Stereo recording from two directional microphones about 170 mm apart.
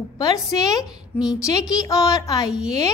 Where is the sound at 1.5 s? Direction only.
20° left (ahead or behind).